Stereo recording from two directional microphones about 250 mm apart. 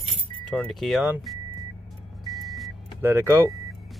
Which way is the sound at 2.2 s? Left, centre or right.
Centre.